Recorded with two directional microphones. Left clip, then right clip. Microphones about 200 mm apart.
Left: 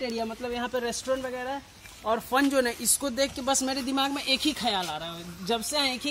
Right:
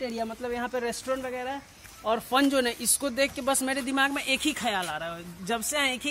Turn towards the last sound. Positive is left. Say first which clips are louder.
# even
turn(degrees=0)  # may be behind; listen again after turning